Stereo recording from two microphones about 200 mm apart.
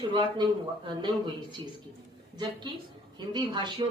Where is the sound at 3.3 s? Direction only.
20° right (ahead or behind).